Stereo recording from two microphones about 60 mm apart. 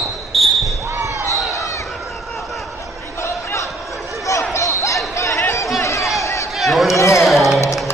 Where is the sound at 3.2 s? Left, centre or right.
Left.